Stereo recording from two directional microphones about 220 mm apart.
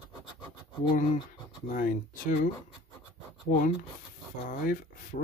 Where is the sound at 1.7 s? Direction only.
40° left (ahead or behind).